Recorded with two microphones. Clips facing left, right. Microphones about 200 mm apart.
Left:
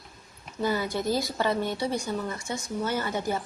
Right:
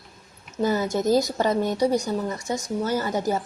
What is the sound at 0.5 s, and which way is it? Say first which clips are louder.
A woman's voice: right 5 dB; 45° right (ahead or behind).